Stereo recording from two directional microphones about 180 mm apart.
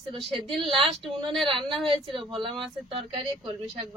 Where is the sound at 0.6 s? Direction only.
30° right (ahead or behind).